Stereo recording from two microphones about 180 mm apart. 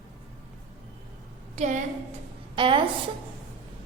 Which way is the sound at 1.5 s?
40° right (ahead or behind).